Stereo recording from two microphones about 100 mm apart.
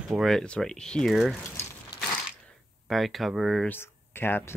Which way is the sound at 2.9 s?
Centre (ahead or behind).